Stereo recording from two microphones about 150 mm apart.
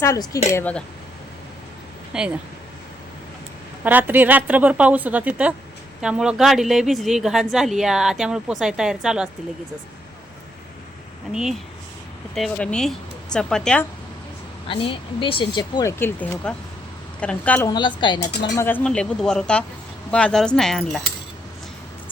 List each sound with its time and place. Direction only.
0.0 s speech: 20° left (ahead or behind)
2.1 s speech: 5° right (ahead or behind)
3.8 s a woman's voice: 10° right (ahead or behind)
11.3 s speech: 5° right (ahead or behind)
14.7 s speech: 35° left (ahead or behind)
15.8 s speech: 15° left (ahead or behind)
17.7 s speech: 30° left (ahead or behind)
18.5 s speech: 15° left (ahead or behind)